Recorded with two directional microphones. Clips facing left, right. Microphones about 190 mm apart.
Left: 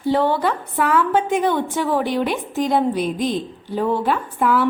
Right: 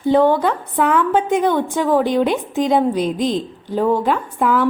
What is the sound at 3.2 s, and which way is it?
Speech, 45° right (ahead or behind).